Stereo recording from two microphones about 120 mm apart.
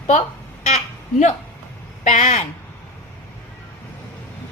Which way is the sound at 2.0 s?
90° left.